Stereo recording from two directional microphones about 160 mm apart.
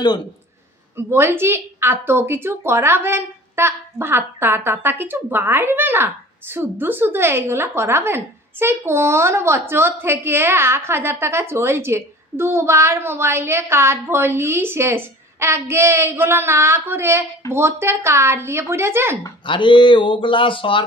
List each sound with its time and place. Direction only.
0.9 s speech: 15° right (ahead or behind)
19.2 s speech: 30° left (ahead or behind)